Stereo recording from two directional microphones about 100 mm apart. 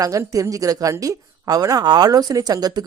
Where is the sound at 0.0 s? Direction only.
35° right (ahead or behind).